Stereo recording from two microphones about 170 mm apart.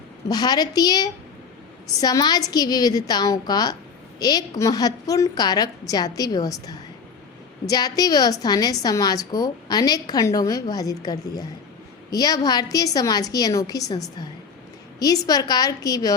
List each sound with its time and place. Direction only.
0.3 s a woman's voice: 25° left (ahead or behind)